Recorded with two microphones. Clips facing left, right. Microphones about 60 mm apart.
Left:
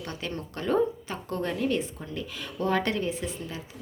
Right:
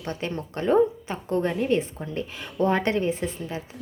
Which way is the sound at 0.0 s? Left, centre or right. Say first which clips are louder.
Right 4 dB; right.